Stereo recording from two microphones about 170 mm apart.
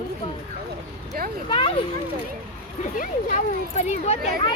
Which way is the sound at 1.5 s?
35° left (ahead or behind).